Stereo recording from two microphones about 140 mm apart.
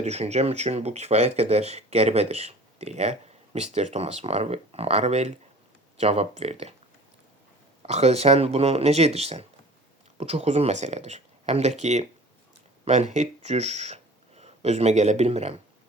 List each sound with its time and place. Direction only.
0.0 s speech: 50° right (ahead or behind)
7.8 s speech: 50° right (ahead or behind)